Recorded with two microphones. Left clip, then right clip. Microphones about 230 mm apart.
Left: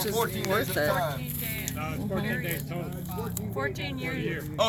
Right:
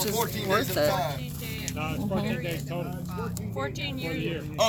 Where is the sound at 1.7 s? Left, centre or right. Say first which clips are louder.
Right 4 dB; right.